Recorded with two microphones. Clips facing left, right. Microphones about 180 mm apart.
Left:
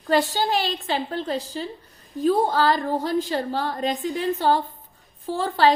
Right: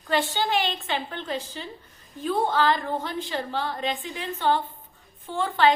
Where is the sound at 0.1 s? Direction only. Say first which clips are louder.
Left 4 dB; 40° left (ahead or behind).